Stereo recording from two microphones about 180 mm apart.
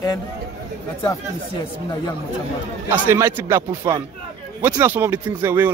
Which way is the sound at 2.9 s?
10° right (ahead or behind).